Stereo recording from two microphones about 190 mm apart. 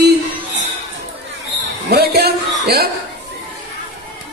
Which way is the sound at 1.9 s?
55° right (ahead or behind).